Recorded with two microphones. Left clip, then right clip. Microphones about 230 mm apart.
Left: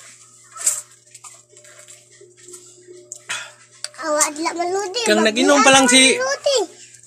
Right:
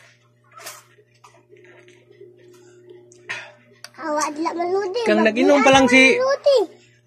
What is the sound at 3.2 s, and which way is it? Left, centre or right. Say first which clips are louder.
Music: left 3 dB; centre.